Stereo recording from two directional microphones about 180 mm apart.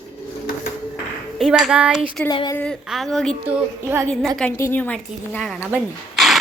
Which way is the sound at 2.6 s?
Centre (ahead or behind).